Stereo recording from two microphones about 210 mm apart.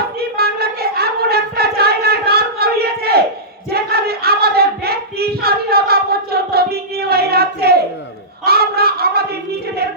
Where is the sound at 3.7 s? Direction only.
50° right (ahead or behind).